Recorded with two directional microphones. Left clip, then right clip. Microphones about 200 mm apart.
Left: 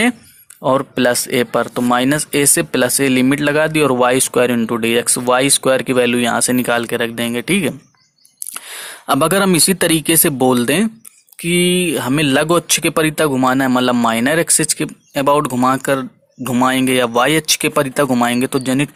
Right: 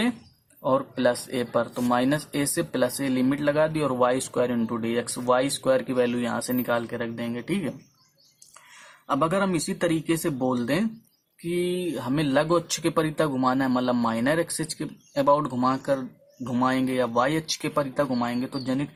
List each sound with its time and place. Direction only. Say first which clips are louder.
0.6 s speech: left 8 dB; 30° left (ahead or behind)
9.0 s speech: left 10 dB; 40° left (ahead or behind)